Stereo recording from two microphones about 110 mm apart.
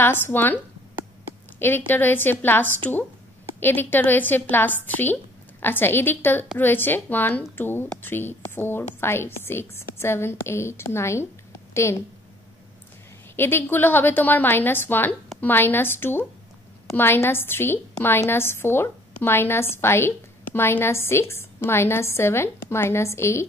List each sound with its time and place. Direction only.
0.0 s a woman's voice: 20° left (ahead or behind)
1.9 s a woman's voice: 15° left (ahead or behind)
13.4 s a woman's voice: 20° left (ahead or behind)